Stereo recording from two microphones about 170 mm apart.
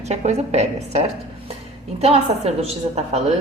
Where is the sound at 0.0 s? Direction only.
40° right (ahead or behind).